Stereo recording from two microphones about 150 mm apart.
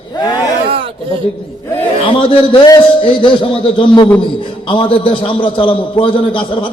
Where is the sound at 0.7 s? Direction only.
40° right (ahead or behind).